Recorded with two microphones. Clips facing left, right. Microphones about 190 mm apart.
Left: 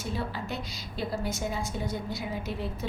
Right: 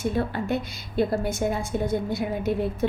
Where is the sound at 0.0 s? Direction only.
55° right (ahead or behind).